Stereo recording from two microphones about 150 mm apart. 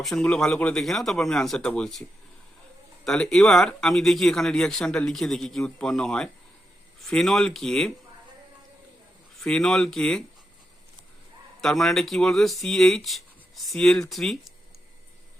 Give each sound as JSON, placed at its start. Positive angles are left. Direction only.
{"t": 0.0, "sound": "speech", "side_deg": 5}
{"t": 9.4, "sound": "speech", "side_deg": 5}
{"t": 11.6, "sound": "speech", "side_deg": 0}